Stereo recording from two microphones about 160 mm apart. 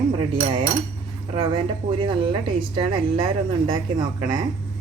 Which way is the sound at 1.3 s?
35° right (ahead or behind).